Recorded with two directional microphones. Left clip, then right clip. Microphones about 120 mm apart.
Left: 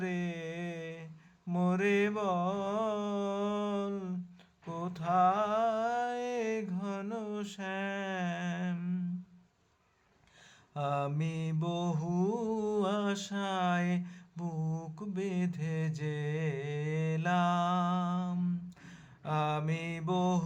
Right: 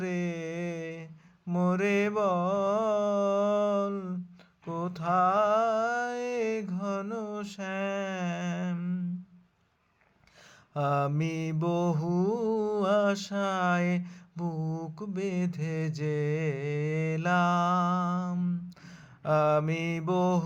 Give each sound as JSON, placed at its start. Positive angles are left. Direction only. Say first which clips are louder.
{"t": 0.0, "sound": "a sound", "louder": "right 4 dB", "side_deg": -30}
{"t": 1.5, "sound": "mantra", "louder": "right 3 dB", "side_deg": -25}
{"t": 10.8, "sound": "mantra", "louder": "right 5 dB", "side_deg": -40}